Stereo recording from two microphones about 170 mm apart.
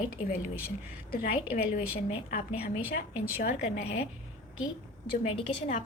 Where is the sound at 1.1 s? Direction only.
60° left (ahead or behind).